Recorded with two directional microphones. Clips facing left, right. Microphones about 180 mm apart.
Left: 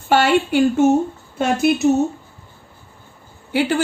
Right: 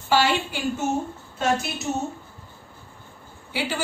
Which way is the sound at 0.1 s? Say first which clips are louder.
Left 6 dB; 55° left (ahead or behind).